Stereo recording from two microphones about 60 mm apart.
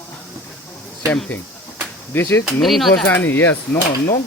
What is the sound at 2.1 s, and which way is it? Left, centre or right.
Speech, left.